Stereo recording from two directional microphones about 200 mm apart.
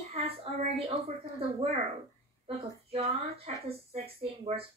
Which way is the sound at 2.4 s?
30° right (ahead or behind).